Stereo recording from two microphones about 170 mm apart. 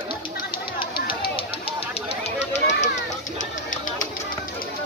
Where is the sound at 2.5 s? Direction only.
90° left.